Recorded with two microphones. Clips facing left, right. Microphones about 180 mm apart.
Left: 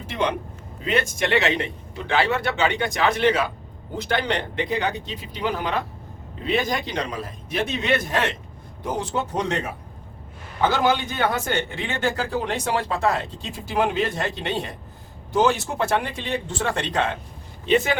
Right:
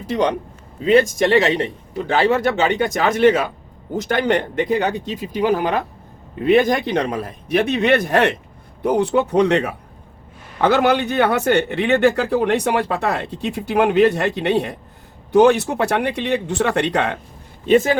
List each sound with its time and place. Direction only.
0.9 s a man's voice: 35° right (ahead or behind); by 17.2 s 65° right (ahead or behind)
17.7 s speech: 45° right (ahead or behind)